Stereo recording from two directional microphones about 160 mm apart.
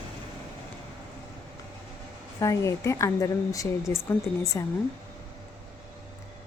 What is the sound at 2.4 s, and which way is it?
A woman's voice, 20° left (ahead or behind).